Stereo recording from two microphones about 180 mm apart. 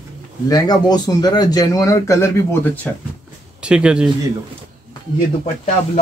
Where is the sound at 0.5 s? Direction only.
20° left (ahead or behind).